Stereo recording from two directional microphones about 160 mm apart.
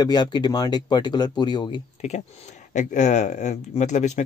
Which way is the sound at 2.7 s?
50° left (ahead or behind).